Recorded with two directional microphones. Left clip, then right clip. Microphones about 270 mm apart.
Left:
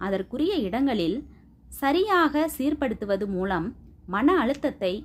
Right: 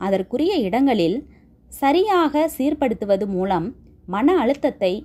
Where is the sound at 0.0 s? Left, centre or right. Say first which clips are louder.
Right 6 dB; centre.